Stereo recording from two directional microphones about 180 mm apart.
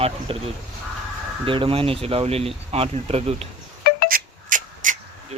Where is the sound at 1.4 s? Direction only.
30° right (ahead or behind).